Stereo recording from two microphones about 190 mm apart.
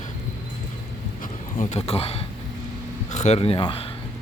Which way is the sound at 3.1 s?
35° left (ahead or behind).